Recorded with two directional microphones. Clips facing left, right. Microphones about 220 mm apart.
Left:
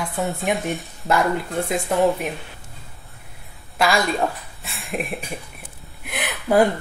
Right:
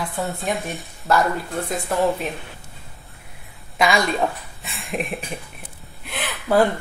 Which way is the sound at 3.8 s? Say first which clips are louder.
Even; centre (ahead or behind).